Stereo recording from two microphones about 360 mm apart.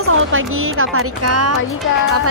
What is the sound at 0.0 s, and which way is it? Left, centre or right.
Speech, right.